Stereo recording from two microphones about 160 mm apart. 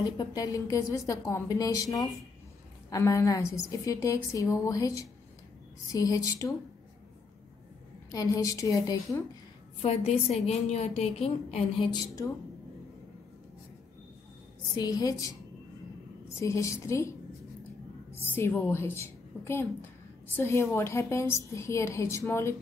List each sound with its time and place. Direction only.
0.0 s a woman's voice: 25° left (ahead or behind)
8.1 s a woman's voice: 20° left (ahead or behind)
9.8 s a woman's voice: 40° left (ahead or behind)
11.9 s a woman's voice: 25° left (ahead or behind)
14.8 s a woman's voice: 25° left (ahead or behind)
16.3 s a woman's voice: 20° left (ahead or behind)
18.2 s a woman's voice: 15° left (ahead or behind)